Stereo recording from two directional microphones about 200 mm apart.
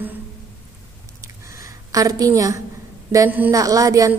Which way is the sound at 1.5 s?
15° right (ahead or behind).